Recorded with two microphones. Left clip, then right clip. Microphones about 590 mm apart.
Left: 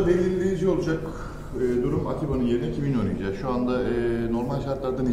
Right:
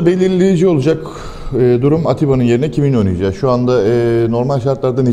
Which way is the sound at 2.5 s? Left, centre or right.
Right.